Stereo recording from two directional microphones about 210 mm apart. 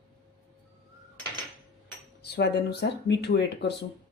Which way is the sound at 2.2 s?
50° left (ahead or behind).